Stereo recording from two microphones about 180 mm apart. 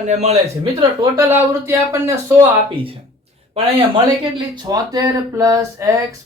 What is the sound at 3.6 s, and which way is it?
Speech, 30° right (ahead or behind).